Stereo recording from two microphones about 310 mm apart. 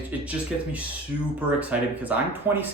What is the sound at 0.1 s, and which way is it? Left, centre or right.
Speech, centre.